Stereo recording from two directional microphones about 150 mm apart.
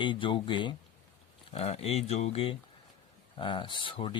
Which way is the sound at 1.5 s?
45° left (ahead or behind).